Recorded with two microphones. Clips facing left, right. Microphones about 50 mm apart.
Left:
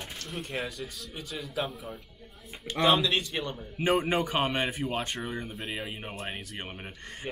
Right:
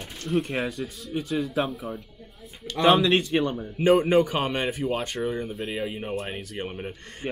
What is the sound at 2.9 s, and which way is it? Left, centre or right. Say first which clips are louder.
Speech: right 6 dB; right.